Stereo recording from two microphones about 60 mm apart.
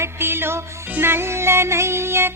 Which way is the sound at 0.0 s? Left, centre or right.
Right.